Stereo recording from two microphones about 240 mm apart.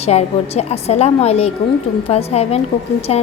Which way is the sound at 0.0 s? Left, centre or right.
Left.